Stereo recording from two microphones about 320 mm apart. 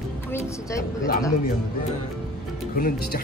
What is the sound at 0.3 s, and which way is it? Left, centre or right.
Music, centre.